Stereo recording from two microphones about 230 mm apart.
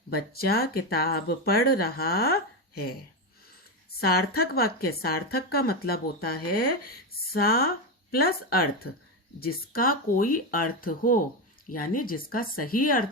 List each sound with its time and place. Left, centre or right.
0.1 s speech: left
4.0 s speech: left